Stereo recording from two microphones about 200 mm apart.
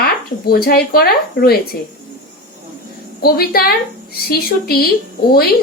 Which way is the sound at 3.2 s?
50° left (ahead or behind).